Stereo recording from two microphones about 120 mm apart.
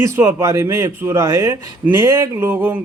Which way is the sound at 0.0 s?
25° right (ahead or behind).